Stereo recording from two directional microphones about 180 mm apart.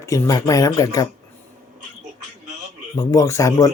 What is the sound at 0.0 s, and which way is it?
Speech, 15° left (ahead or behind).